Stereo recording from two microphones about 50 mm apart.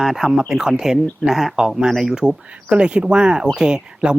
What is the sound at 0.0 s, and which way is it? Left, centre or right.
Speech, centre.